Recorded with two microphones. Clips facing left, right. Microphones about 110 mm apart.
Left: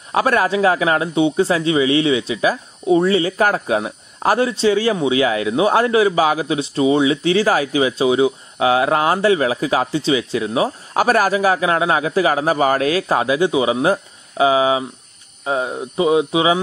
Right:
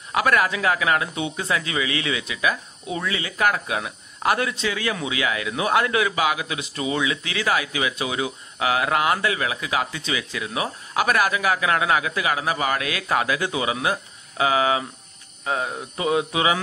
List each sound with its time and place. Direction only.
0.1 s speech: 30° left (ahead or behind)